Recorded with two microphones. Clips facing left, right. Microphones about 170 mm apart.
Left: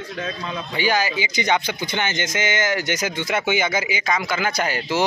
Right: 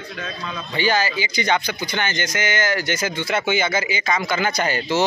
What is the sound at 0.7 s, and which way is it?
Speech, 10° left (ahead or behind).